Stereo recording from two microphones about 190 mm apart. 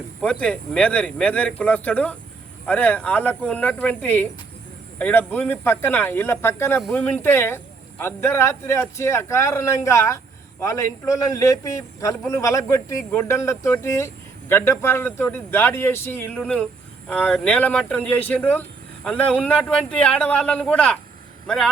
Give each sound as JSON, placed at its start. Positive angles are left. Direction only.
{"t": 0.2, "sound": "a man's voice", "side_deg": 5}